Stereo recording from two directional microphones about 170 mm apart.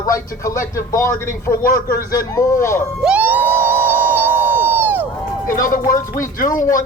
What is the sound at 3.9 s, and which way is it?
Crowd, 10° right (ahead or behind).